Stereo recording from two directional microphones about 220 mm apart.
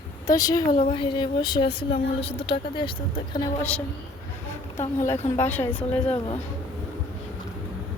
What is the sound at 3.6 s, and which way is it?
Speech, 5° left (ahead or behind).